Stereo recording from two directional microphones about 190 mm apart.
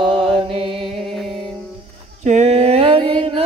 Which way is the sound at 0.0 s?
25° right (ahead or behind).